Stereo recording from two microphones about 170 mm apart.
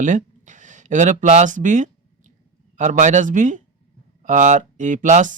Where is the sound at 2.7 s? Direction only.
45° right (ahead or behind).